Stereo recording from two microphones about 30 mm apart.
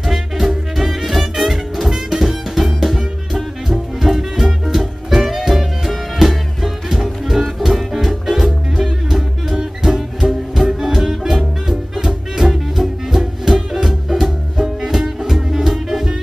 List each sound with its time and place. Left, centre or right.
0.0 s music: centre
4.0 s music: centre
14.2 s music: right